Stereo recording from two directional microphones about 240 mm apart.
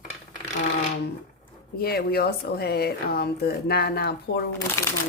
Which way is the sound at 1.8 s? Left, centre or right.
Left.